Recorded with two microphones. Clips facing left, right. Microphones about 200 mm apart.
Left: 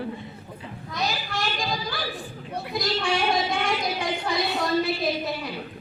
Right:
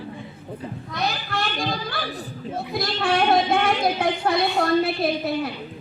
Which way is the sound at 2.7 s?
60° right (ahead or behind).